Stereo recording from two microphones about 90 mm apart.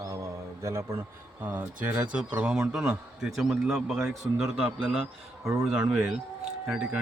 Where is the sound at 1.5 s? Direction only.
20° right (ahead or behind).